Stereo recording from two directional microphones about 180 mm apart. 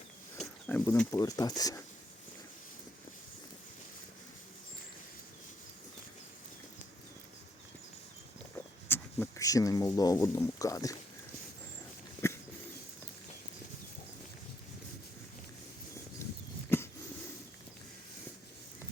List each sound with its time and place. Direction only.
0.3 s speech: 10° left (ahead or behind)
8.5 s speech: 10° left (ahead or behind)
16.6 s a sound: 10° left (ahead or behind)